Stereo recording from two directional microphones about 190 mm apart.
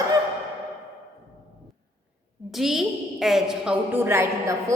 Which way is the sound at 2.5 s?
Centre (ahead or behind).